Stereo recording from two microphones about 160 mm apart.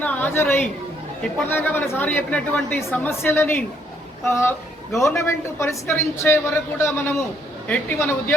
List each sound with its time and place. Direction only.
0.0 s a woman's voice: 10° left (ahead or behind)